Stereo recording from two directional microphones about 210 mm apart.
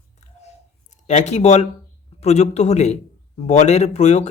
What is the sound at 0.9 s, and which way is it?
Speech, 35° left (ahead or behind).